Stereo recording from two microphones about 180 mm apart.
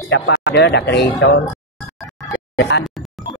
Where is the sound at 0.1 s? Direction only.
75° left (ahead or behind).